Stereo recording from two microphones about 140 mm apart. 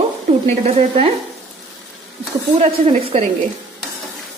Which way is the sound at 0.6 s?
45° right (ahead or behind).